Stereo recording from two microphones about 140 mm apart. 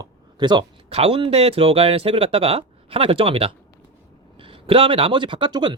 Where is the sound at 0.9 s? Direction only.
45° right (ahead or behind).